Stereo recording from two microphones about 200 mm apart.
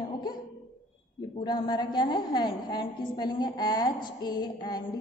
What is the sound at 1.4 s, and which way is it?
A woman's voice, 20° left (ahead or behind).